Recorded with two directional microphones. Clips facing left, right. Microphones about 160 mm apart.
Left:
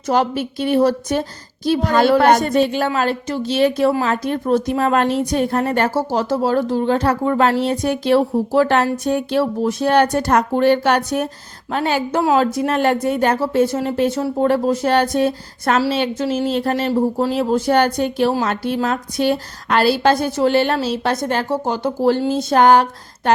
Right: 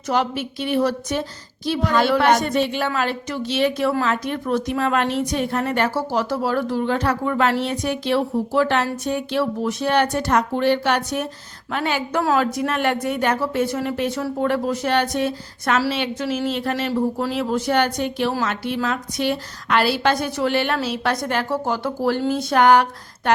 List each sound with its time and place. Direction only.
0.1 s speech: 40° left (ahead or behind)
5.9 s speech: 25° left (ahead or behind)